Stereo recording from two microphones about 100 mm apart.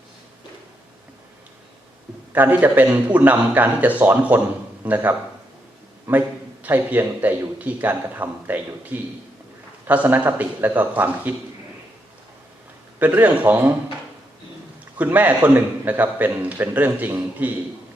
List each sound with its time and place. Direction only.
2.3 s a man's voice: 15° right (ahead or behind)
6.1 s a man's voice: 15° right (ahead or behind)
13.0 s a man's voice: 15° right (ahead or behind)
14.9 s a man's voice: 15° right (ahead or behind)